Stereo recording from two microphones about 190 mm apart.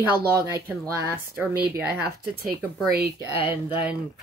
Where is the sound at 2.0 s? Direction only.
55° right (ahead or behind).